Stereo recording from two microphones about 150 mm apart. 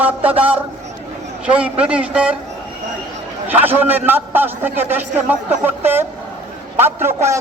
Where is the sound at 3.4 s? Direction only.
15° right (ahead or behind).